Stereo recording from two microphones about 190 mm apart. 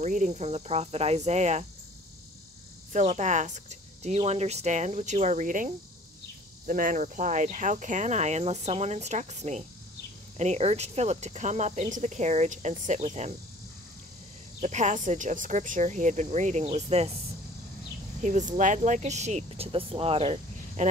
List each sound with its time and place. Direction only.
0.0 s speech: 40° right (ahead or behind)
2.9 s speech: 40° right (ahead or behind)
14.6 s speech: 40° right (ahead or behind)
18.2 s speech: 40° right (ahead or behind)